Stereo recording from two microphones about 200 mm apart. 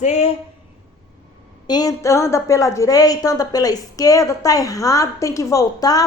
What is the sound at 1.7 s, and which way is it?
A woman's voice, 20° left (ahead or behind).